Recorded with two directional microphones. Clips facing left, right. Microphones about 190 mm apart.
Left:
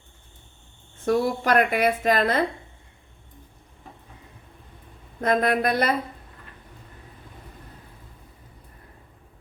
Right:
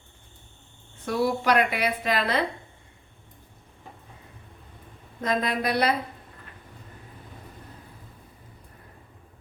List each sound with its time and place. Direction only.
1.0 s a woman's voice: 45° left (ahead or behind)
5.2 s speech: 55° left (ahead or behind)